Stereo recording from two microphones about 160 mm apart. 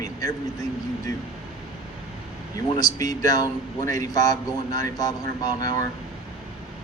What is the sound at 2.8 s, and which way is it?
Speech, 25° left (ahead or behind).